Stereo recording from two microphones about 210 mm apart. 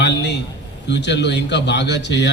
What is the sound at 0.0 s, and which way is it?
A man's voice, 55° left (ahead or behind).